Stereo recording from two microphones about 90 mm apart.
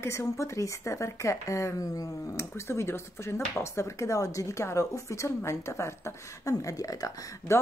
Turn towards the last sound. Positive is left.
turn(degrees=40)  # may be behind; listen again after turning